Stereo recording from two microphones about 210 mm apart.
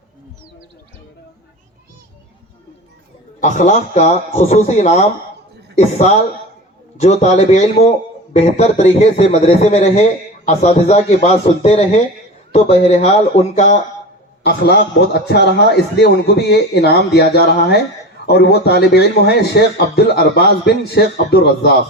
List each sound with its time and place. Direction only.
3.4 s a man's voice: 35° left (ahead or behind)
14.4 s a man's voice: 55° left (ahead or behind)